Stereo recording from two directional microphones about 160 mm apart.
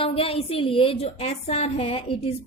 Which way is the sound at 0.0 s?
35° left (ahead or behind).